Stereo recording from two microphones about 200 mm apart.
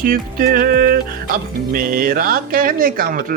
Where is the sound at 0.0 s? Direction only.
45° right (ahead or behind).